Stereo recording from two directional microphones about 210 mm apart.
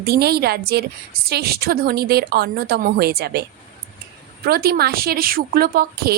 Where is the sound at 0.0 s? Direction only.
50° right (ahead or behind).